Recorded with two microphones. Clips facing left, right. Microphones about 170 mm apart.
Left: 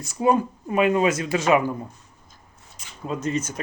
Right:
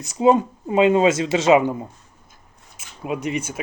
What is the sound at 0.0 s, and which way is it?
Speech, 20° right (ahead or behind).